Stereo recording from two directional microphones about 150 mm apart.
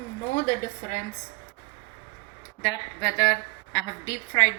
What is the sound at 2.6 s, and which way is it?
A woman's voice, 25° left (ahead or behind).